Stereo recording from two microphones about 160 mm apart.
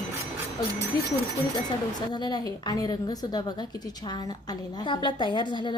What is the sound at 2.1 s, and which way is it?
A woman's voice, 25° left (ahead or behind).